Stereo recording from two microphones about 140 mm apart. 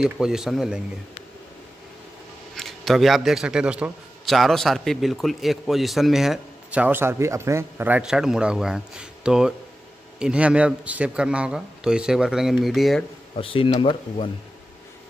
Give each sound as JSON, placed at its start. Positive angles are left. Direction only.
{"t": 0.0, "sound": "a man's voice", "side_deg": -5}
{"t": 2.5, "sound": "a man's voice", "side_deg": 0}
{"t": 13.4, "sound": "speech", "side_deg": 40}